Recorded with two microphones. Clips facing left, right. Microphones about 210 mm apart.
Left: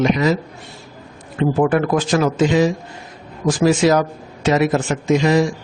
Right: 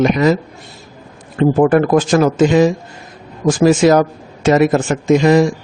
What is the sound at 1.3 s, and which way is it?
A man's voice, 45° right (ahead or behind).